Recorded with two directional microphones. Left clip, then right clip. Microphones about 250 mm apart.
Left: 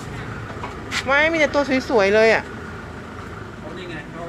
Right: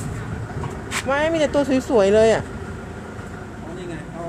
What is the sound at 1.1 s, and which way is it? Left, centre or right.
Speech, centre.